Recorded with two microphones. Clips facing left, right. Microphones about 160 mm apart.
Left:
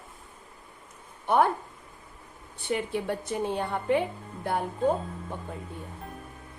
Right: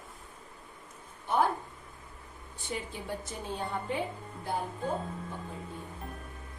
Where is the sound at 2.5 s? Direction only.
70° left (ahead or behind).